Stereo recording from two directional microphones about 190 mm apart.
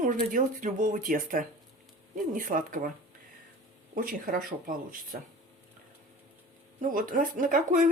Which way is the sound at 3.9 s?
45° right (ahead or behind).